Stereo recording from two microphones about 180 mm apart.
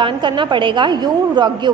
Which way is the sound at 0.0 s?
25° right (ahead or behind).